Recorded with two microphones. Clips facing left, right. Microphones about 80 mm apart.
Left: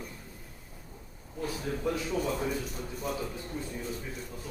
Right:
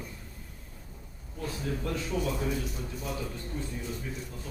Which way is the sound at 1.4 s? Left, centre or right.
Centre.